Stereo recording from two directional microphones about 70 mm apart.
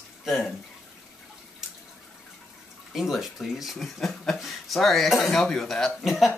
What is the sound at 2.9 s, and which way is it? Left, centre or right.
Speech, centre.